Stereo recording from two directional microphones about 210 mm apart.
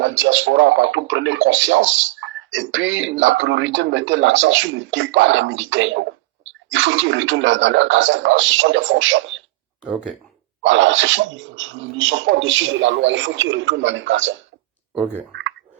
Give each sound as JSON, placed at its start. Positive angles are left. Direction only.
{"t": 0.0, "sound": "a man's voice", "side_deg": -65}
{"t": 10.6, "sound": "a man's voice", "side_deg": -60}